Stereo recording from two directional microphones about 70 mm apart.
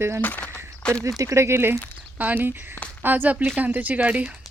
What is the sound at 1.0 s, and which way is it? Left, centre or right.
Speech, right.